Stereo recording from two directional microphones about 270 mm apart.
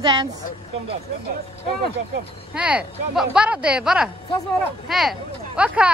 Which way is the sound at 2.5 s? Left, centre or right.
Centre.